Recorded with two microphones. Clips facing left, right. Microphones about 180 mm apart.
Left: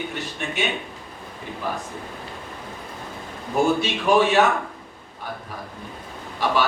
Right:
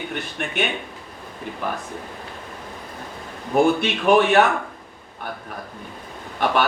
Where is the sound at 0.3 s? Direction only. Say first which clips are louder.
Right 2 dB; 60° right (ahead or behind).